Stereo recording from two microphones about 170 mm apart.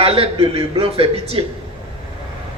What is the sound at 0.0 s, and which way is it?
A man's voice, 35° right (ahead or behind).